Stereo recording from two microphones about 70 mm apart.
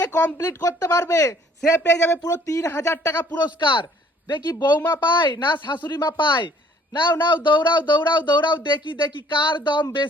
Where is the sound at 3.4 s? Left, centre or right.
Left.